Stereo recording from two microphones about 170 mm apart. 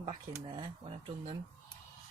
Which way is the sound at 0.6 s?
30° right (ahead or behind).